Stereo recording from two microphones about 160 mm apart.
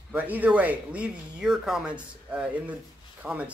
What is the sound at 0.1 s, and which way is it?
Speech, 10° right (ahead or behind).